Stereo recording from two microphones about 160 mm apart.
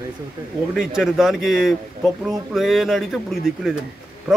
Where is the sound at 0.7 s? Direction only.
5° right (ahead or behind).